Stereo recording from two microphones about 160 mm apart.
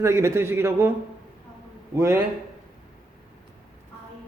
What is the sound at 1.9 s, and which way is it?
Speech, 15° right (ahead or behind).